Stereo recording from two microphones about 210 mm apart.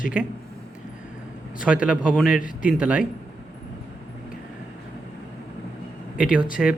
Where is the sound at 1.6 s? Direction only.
5° right (ahead or behind).